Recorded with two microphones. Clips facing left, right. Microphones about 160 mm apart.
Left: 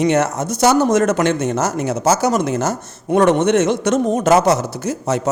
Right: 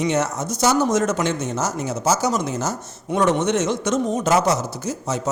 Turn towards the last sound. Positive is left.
turn(degrees=60)  # may be behind; listen again after turning